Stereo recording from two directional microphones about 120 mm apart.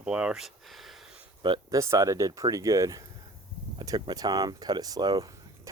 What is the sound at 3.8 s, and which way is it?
Speech, 35° right (ahead or behind).